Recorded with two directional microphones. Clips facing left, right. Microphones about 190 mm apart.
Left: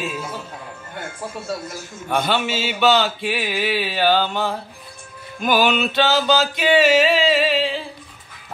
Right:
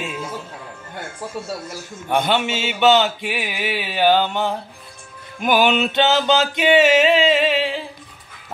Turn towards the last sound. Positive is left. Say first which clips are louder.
# even
turn(degrees=-15)  # may be behind; listen again after turning